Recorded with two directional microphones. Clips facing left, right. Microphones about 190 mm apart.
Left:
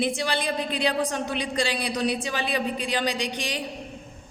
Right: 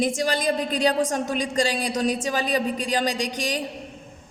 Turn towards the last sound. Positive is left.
turn(degrees=-40)  # may be behind; listen again after turning